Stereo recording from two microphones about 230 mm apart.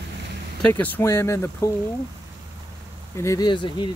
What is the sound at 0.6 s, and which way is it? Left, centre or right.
Speech, centre.